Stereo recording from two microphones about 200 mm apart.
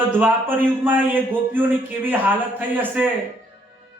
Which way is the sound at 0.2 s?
10° right (ahead or behind).